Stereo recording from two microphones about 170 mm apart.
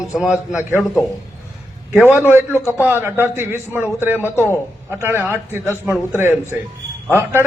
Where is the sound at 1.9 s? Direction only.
10° right (ahead or behind).